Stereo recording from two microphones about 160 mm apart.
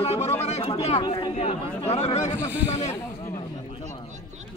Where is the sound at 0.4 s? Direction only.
40° left (ahead or behind).